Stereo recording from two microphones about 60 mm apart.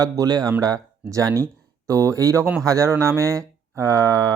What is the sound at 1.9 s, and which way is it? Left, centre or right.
Speech, right.